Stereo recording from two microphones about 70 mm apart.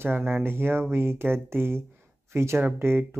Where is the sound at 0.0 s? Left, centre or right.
Right.